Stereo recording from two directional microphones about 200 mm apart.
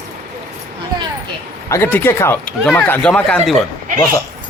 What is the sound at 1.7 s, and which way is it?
Speech, 10° left (ahead or behind).